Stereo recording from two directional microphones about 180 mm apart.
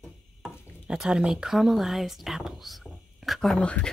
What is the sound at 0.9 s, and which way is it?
Speech, 5° right (ahead or behind).